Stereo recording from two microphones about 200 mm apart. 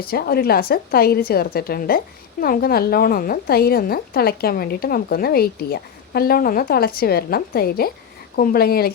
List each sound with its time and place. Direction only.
0.0 s a woman's voice: 50° left (ahead or behind)